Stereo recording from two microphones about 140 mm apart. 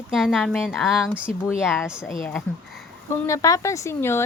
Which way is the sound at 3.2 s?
25° left (ahead or behind).